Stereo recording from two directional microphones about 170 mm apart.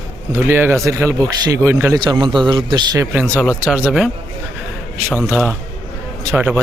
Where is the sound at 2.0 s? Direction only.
25° right (ahead or behind).